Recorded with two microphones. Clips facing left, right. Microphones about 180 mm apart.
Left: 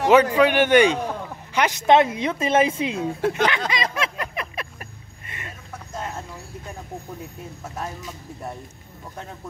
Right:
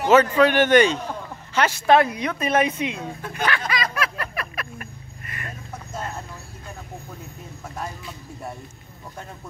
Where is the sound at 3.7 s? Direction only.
25° left (ahead or behind).